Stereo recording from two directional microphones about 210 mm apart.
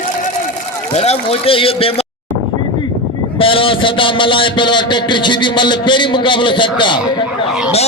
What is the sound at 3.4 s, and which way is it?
A man's voice, 25° left (ahead or behind).